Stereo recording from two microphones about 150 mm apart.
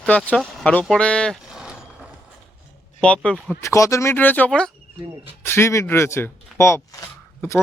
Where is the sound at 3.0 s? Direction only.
5° left (ahead or behind).